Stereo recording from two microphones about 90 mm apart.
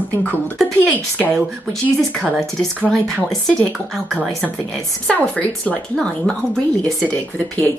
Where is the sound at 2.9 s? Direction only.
5° left (ahead or behind).